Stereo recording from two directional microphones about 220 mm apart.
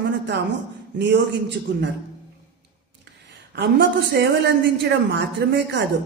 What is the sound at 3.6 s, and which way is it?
A woman's voice, 50° right (ahead or behind).